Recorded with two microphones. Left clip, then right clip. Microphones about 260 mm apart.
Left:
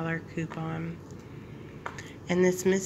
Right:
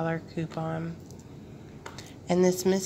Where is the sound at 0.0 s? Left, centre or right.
Centre.